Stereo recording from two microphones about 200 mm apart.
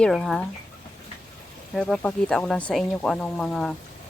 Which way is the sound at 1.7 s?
5° left (ahead or behind).